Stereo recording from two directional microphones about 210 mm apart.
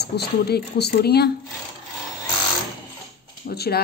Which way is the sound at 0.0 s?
50° left (ahead or behind).